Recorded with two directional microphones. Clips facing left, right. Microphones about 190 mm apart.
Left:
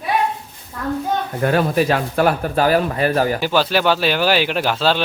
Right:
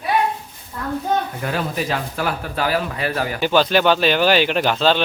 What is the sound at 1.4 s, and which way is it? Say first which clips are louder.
Speech: left 7 dB; 55° left (ahead or behind).